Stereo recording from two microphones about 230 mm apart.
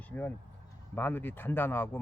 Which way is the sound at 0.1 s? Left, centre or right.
Centre.